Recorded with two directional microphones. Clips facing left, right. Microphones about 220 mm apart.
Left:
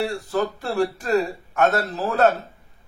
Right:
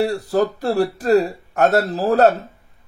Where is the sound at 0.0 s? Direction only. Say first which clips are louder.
Right 5 dB; 40° right (ahead or behind).